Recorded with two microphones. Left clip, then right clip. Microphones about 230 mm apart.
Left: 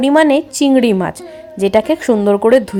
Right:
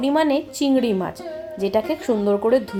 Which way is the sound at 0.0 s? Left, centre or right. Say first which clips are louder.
Left 8 dB; left.